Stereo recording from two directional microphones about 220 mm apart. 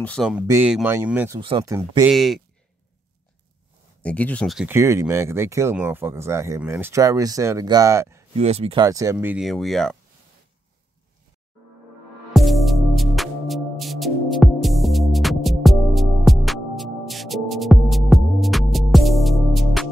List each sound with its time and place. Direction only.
0.0 s speech: centre (ahead or behind)
1.4 s speech: 25° right (ahead or behind)
1.7 s speech: 15° right (ahead or behind)
2.0 s speech: centre (ahead or behind)
4.0 s speech: 5° left (ahead or behind); by 8.3 s 15° right (ahead or behind)
8.4 s speech: 25° right (ahead or behind); by 9.9 s centre (ahead or behind)
12.4 s music: centre (ahead or behind)